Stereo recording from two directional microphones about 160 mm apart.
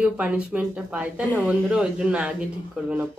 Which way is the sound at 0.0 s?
5° right (ahead or behind).